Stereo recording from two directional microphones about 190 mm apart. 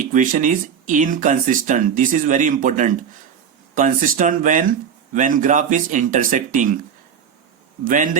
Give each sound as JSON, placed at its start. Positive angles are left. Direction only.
{"t": 0.0, "sound": "speech", "side_deg": -45}
{"t": 7.9, "sound": "speech", "side_deg": -45}